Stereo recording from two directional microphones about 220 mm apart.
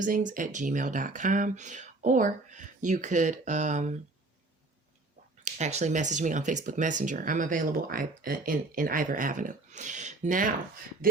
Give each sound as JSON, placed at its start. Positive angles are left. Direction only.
{"t": 0.0, "sound": "speech", "side_deg": -35}
{"t": 5.5, "sound": "speech", "side_deg": -30}